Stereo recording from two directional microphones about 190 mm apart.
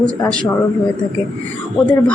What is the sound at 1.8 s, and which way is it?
Speech, centre (ahead or behind).